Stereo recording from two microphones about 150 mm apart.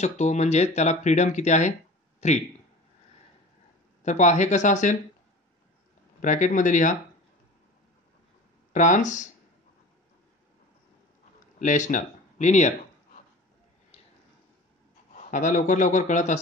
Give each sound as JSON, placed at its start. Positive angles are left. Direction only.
{"t": 0.0, "sound": "speech", "side_deg": 50}
{"t": 4.0, "sound": "speech", "side_deg": 50}
{"t": 6.2, "sound": "a man's voice", "side_deg": 55}
{"t": 8.7, "sound": "a man's voice", "side_deg": 55}
{"t": 11.6, "sound": "speech", "side_deg": 55}
{"t": 13.9, "sound": "a sound", "side_deg": 40}
{"t": 15.1, "sound": "a man's voice", "side_deg": 55}